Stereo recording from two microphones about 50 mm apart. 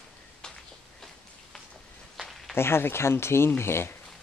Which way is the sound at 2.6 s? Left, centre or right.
Left.